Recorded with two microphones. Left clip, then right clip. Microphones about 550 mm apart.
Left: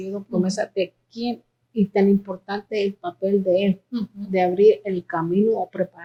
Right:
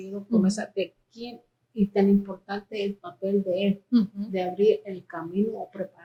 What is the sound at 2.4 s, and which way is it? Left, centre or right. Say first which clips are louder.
A woman's voice: left 6 dB; left.